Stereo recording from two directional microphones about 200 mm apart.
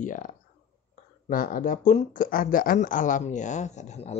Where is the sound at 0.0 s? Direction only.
40° left (ahead or behind).